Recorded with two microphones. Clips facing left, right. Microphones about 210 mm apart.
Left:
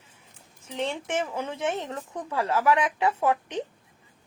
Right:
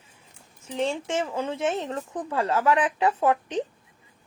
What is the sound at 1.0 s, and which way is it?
Speech, 25° right (ahead or behind).